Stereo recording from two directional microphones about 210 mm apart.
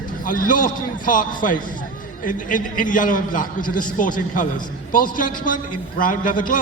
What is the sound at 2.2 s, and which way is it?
A man's voice, 40° left (ahead or behind).